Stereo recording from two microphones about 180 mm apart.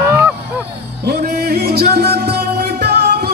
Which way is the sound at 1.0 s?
60° right (ahead or behind).